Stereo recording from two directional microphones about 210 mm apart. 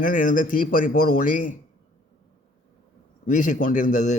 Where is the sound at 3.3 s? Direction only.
35° left (ahead or behind).